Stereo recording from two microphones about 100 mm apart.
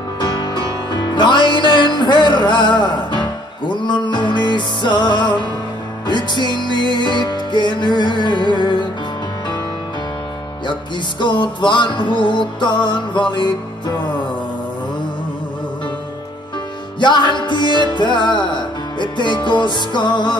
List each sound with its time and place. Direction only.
0.2 s music: 50° left (ahead or behind)
10.7 s music: 50° left (ahead or behind)
17.0 s music: 50° left (ahead or behind)